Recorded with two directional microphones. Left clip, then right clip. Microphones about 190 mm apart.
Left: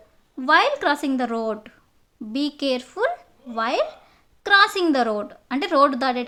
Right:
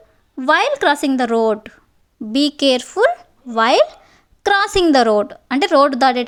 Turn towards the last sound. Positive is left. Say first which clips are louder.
# right 6 dB
turn(degrees=-35)  # may be behind; listen again after turning